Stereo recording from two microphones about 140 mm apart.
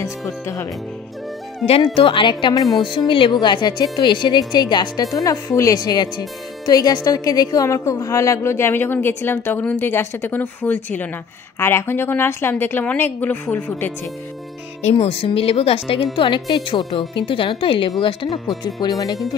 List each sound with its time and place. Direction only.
2.0 s a woman's voice: 40° left (ahead or behind); by 13.9 s 15° left (ahead or behind)
14.8 s a woman's voice: 45° left (ahead or behind); by 19.1 s 30° left (ahead or behind)